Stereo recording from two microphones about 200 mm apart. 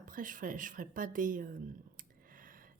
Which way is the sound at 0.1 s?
40° right (ahead or behind).